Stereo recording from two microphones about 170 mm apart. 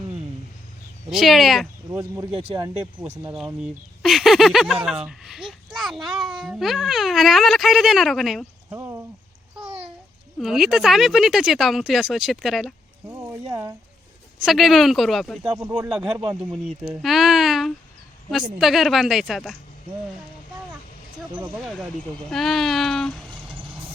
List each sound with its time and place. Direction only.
1.1 s speech: centre (ahead or behind)
1.9 s speech: 15° right (ahead or behind)
2.4 s speech: 35° right (ahead or behind)
3.3 s speech: 5° right (ahead or behind)
8.7 s a sound: 15° right (ahead or behind)
10.3 s speech: centre (ahead or behind)
13.1 s a sound: 15° right (ahead or behind)
14.4 s speech: centre (ahead or behind)
15.4 s speech: 20° right (ahead or behind)
15.9 s speech: 5° right (ahead or behind)
21.3 s speech: centre (ahead or behind)